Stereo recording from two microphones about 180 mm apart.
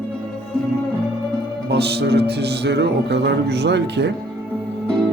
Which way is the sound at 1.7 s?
65° right (ahead or behind).